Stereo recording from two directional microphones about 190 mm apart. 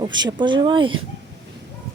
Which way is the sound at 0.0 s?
20° right (ahead or behind).